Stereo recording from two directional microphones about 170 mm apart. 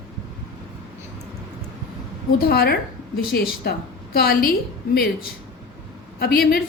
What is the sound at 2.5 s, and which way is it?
A woman's voice, 65° left (ahead or behind).